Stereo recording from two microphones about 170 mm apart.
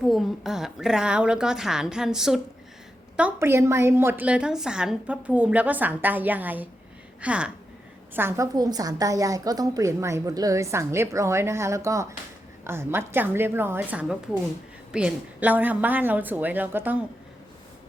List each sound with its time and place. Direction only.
0.1 s a woman's voice: centre (ahead or behind)